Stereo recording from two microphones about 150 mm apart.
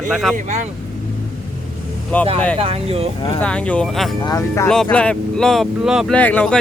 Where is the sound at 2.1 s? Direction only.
10° left (ahead or behind).